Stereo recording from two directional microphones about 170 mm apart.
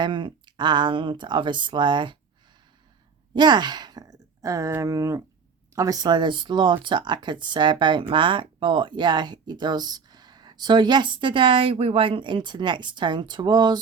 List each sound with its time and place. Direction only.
0.0 s speech: 25° right (ahead or behind)
3.3 s speech: 25° right (ahead or behind)